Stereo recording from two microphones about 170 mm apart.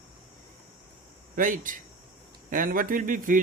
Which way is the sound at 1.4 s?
50° right (ahead or behind).